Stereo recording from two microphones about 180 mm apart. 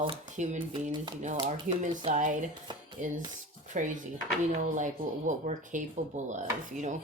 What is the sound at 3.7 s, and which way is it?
Speech, 45° right (ahead or behind).